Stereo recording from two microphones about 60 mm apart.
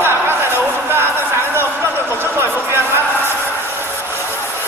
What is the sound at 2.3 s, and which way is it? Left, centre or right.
Speech, right.